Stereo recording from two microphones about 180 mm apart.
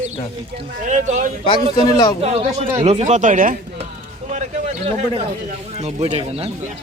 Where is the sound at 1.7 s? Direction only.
25° left (ahead or behind).